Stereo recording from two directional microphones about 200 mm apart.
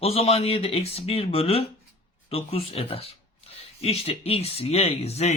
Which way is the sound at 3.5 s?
30° left (ahead or behind).